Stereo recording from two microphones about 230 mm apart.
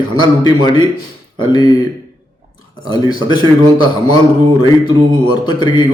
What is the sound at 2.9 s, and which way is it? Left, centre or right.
A man's voice, centre.